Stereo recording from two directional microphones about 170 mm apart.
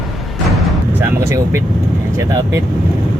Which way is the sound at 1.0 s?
15° right (ahead or behind).